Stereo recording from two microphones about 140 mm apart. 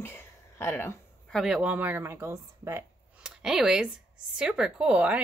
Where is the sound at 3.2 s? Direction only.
5° right (ahead or behind).